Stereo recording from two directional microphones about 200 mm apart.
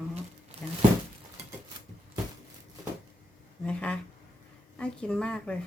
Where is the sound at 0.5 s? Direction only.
30° right (ahead or behind).